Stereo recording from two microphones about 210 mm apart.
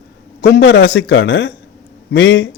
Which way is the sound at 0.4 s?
60° left (ahead or behind).